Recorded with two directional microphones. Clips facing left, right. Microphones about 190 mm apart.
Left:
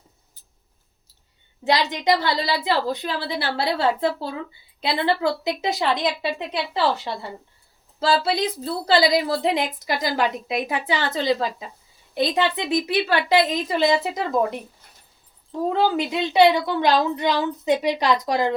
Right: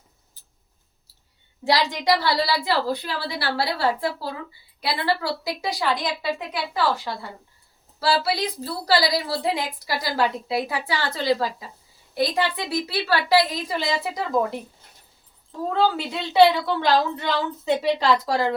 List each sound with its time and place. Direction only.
1.6 s a woman's voice: 20° left (ahead or behind)
15.6 s a woman's voice: 20° left (ahead or behind)